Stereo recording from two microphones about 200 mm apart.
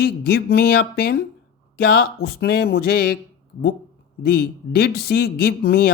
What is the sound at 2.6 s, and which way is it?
Speech, 50° left (ahead or behind).